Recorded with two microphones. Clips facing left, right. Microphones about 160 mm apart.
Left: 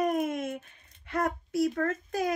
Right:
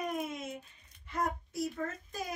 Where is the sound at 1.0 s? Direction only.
75° left (ahead or behind).